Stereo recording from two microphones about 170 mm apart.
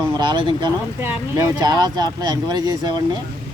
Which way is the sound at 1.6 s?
25° right (ahead or behind).